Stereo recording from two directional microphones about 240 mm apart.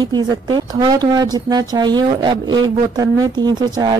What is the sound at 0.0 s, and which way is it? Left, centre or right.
Speech, centre.